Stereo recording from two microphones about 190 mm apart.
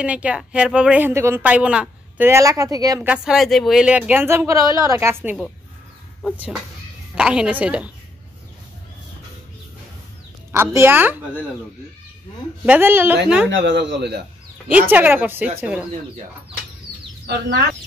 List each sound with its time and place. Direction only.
0.0 s a woman's voice: 5° right (ahead or behind)
3.0 s a woman's voice: 5° right (ahead or behind)
10.5 s a woman's voice: 15° right (ahead or behind)
12.6 s a woman's voice: 10° right (ahead or behind)
13.5 s speech: 70° right (ahead or behind)
14.7 s a woman's voice: 10° right (ahead or behind)